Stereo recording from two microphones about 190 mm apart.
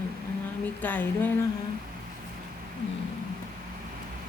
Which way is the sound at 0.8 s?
10° left (ahead or behind).